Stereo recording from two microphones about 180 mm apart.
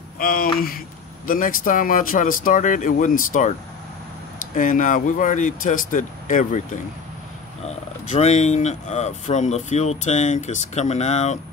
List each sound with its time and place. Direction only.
0.2 s speech: 55° left (ahead or behind)
4.6 s speech: 45° left (ahead or behind)